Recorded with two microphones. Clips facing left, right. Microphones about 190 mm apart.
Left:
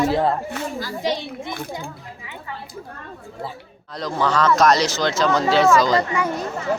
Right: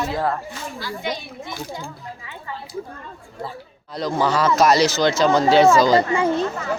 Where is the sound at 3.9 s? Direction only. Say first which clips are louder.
Right 1 dB; 5° right (ahead or behind).